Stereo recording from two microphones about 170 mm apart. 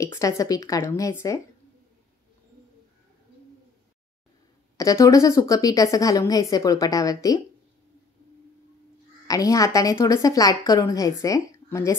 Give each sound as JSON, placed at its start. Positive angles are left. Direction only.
{"t": 0.0, "sound": "speech", "side_deg": 20}
{"t": 4.7, "sound": "speech", "side_deg": 20}
{"t": 9.3, "sound": "speech", "side_deg": 20}